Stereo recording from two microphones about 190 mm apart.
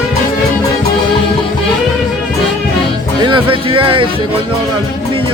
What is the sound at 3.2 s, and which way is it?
Speech, 25° right (ahead or behind).